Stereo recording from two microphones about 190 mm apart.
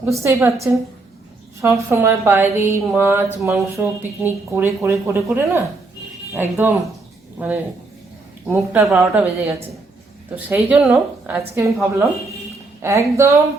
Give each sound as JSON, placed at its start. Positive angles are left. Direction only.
{"t": 0.0, "sound": "a woman's voice", "side_deg": -15}
{"t": 1.6, "sound": "a woman's voice", "side_deg": -15}
{"t": 10.3, "sound": "a woman's voice", "side_deg": -5}